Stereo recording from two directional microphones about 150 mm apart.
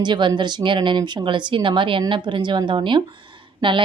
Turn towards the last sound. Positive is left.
turn(degrees=-30)  # may be behind; listen again after turning